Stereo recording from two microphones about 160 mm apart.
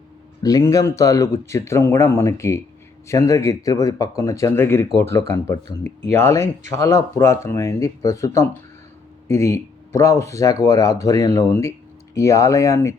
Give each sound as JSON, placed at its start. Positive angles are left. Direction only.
{"t": 0.4, "sound": "speech", "side_deg": 20}